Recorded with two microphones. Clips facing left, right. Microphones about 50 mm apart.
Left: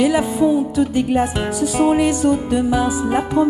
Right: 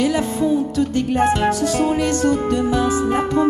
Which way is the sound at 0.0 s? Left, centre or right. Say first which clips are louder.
Left 3 dB; centre.